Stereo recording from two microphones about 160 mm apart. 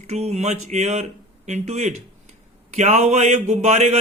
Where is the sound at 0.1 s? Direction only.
45° right (ahead or behind).